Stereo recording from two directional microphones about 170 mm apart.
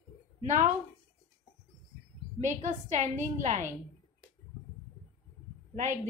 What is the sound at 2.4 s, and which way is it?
A woman's voice, 45° right (ahead or behind).